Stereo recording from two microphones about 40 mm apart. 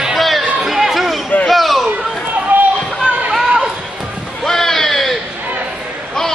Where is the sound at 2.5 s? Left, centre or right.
Right.